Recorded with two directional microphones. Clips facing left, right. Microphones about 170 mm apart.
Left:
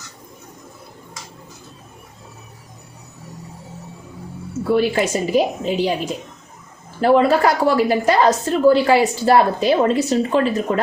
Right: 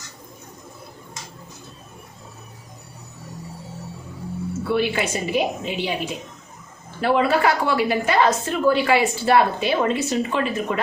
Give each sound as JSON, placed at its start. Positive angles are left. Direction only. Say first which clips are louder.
{"t": 4.7, "sound": "a woman's voice", "louder": "left 5 dB", "side_deg": 40}